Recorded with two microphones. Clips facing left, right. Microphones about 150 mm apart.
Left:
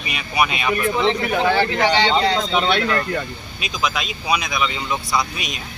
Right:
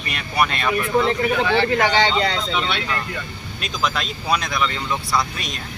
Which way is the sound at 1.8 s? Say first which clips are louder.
Left 1 dB; 50° right (ahead or behind).